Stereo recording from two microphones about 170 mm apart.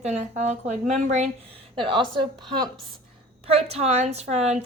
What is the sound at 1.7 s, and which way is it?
Speech, 30° right (ahead or behind).